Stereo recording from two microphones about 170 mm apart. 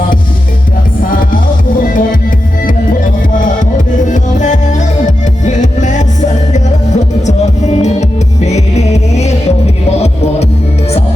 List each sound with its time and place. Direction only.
1.1 s music: 55° left (ahead or behind)